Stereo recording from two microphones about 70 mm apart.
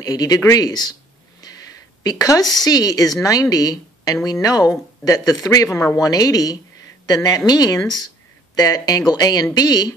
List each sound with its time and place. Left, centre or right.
0.0 s a woman's voice: left
2.0 s a woman's voice: left
7.2 s speech: left